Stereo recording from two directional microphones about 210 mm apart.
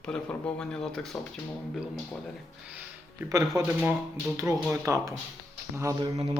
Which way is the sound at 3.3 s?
15° right (ahead or behind).